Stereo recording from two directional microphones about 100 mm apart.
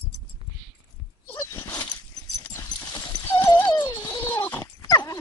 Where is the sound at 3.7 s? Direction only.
45° left (ahead or behind).